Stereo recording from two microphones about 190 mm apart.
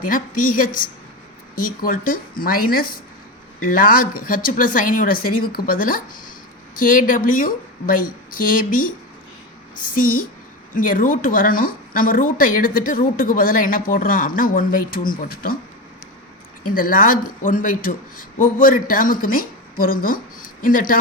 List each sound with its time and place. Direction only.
0.0 s a woman's voice: 45° left (ahead or behind)
16.6 s a woman's voice: 45° left (ahead or behind)